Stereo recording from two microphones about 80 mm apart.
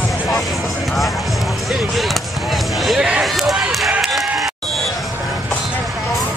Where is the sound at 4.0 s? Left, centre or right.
Centre.